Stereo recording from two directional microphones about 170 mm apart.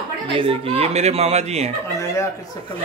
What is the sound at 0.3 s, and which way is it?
A man's voice, 35° right (ahead or behind).